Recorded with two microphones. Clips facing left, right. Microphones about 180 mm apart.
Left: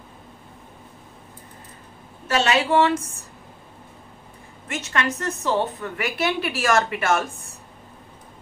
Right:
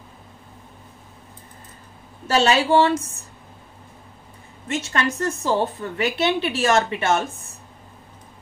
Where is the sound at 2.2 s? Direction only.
30° right (ahead or behind).